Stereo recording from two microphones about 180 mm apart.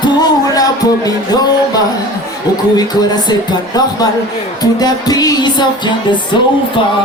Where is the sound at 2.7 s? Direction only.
25° left (ahead or behind).